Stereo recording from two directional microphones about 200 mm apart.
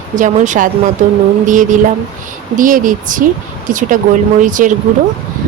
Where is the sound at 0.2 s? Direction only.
40° right (ahead or behind).